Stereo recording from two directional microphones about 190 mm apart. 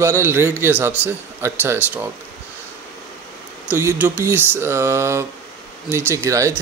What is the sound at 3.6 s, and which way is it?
Speech, 10° right (ahead or behind).